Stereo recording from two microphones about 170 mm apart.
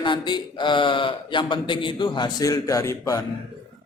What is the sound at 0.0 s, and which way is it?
A man's voice, 30° left (ahead or behind).